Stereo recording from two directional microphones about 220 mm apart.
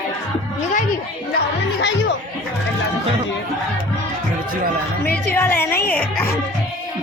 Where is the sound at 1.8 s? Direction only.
55° left (ahead or behind).